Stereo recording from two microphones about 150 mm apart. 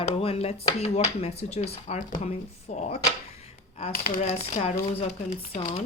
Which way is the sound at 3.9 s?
65° left (ahead or behind).